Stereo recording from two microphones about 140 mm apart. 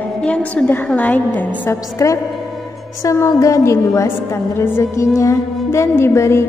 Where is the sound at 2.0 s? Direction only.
25° left (ahead or behind).